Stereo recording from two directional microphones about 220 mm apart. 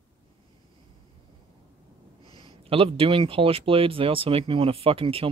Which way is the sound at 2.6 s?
25° right (ahead or behind).